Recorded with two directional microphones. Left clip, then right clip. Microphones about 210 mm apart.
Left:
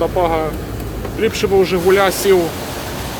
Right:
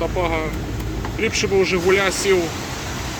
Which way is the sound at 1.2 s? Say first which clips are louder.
Left 4 dB; 15° left (ahead or behind).